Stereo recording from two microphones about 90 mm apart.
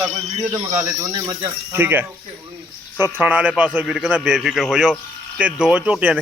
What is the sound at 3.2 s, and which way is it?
Speech, 15° right (ahead or behind).